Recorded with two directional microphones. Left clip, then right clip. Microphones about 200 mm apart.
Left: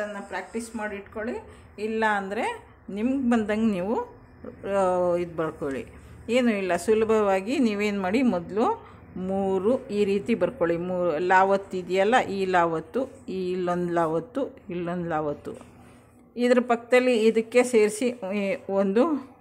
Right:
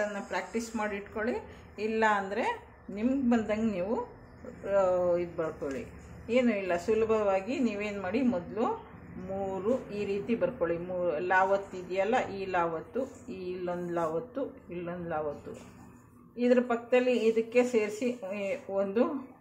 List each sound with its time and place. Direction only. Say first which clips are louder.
0.0 s a woman's voice: left 1 dB; 10° left (ahead or behind)
1.9 s a woman's voice: left 2 dB; 20° left (ahead or behind); by 15.2 s 50° left (ahead or behind)
16.3 s speech: left 5 dB; 50° left (ahead or behind)